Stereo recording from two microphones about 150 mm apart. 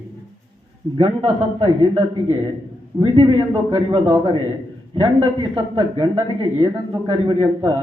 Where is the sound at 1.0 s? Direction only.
30° right (ahead or behind).